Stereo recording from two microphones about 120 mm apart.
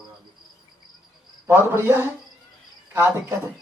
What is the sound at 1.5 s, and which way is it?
Speech, 20° right (ahead or behind).